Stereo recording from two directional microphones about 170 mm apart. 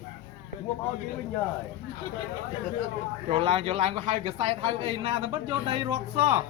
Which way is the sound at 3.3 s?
35° right (ahead or behind).